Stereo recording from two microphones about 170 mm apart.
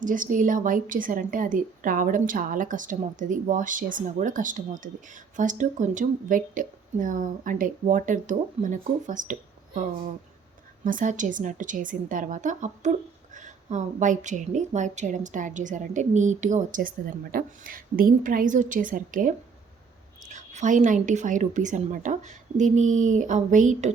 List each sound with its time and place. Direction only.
0.0 s a woman's voice: 50° right (ahead or behind)
10.8 s a woman's voice: 50° right (ahead or behind)